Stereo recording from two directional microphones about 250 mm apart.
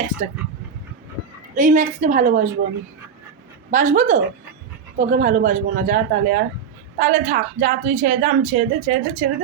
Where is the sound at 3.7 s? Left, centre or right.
Right.